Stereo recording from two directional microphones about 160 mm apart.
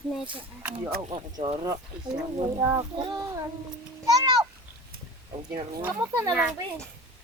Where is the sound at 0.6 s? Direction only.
10° right (ahead or behind).